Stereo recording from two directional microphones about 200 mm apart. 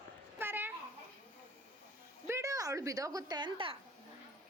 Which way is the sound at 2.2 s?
15° right (ahead or behind).